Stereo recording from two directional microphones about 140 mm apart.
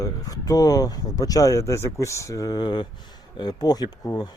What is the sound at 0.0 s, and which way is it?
Speech, 25° left (ahead or behind).